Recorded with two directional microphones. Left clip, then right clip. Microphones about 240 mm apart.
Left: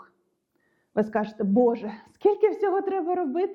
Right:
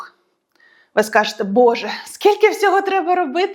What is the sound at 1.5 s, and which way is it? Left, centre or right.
Speech, centre.